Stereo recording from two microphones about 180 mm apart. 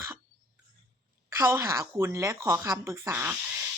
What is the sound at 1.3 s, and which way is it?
Speech, 15° right (ahead or behind).